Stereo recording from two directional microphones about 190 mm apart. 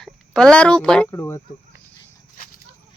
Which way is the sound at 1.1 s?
15° left (ahead or behind).